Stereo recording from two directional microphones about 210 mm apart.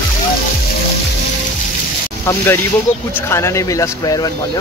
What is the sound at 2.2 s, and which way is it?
Speech, 10° left (ahead or behind).